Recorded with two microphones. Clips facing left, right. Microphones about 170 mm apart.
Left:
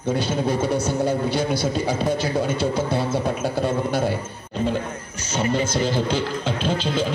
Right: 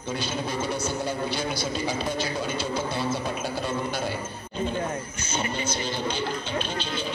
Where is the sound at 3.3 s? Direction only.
55° left (ahead or behind); by 4.8 s 75° left (ahead or behind).